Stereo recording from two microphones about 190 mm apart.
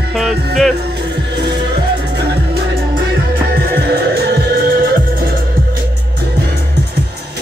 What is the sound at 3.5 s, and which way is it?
Music, 55° right (ahead or behind).